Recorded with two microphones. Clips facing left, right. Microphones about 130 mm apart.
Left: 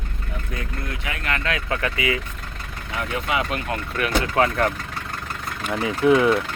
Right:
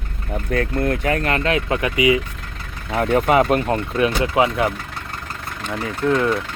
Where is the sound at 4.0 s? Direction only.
15° right (ahead or behind).